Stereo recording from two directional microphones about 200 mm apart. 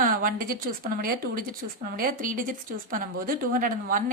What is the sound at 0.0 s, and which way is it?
Speech, 45° right (ahead or behind).